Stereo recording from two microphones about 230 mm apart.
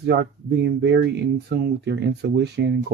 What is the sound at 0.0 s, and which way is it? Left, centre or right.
Speech, right.